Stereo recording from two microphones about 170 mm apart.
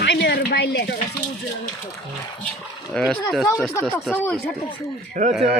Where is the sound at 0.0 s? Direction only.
80° left.